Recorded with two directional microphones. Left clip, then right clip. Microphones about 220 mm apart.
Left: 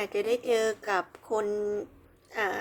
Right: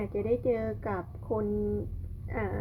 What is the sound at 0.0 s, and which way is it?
A woman's voice, 20° left (ahead or behind).